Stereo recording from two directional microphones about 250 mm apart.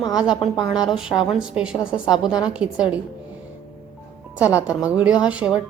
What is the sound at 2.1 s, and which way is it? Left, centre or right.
Speech, centre.